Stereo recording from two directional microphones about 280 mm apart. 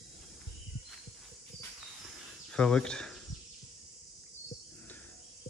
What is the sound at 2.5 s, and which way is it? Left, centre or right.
Speech, centre.